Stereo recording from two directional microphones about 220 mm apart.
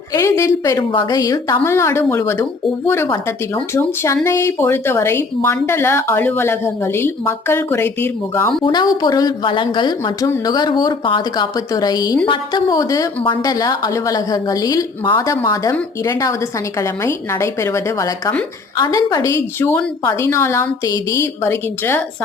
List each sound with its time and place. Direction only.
0.1 s a woman's voice: 15° left (ahead or behind)